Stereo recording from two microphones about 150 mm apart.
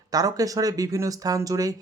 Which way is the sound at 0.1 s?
25° right (ahead or behind).